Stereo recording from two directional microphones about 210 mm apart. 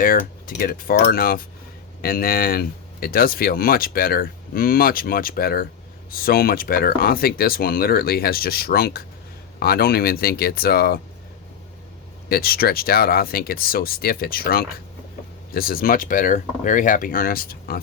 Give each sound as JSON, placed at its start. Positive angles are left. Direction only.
{"t": 0.0, "sound": "speech", "side_deg": 45}
{"t": 12.3, "sound": "speech", "side_deg": 45}